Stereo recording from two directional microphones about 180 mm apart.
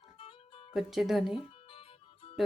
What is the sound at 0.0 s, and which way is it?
Music, 30° left (ahead or behind).